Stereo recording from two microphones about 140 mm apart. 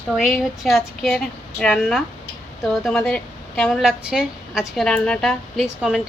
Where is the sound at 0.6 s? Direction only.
Centre (ahead or behind).